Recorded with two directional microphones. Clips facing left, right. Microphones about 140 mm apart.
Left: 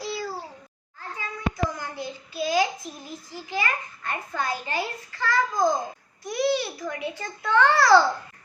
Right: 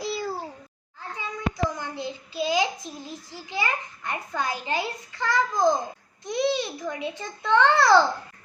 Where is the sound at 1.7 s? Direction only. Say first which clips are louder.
Right 1 dB; 20° right (ahead or behind).